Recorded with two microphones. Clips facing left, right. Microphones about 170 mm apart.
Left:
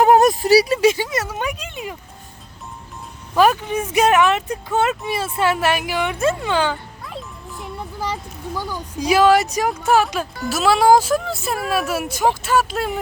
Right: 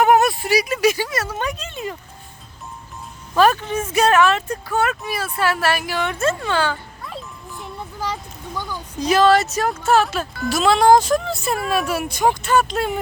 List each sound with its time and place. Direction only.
0.0 s speech: 35° left (ahead or behind); by 2.0 s 10° left (ahead or behind)
3.3 s speech: 10° left (ahead or behind)
7.6 s a sound: centre (ahead or behind)
8.7 s speech: 10° left (ahead or behind)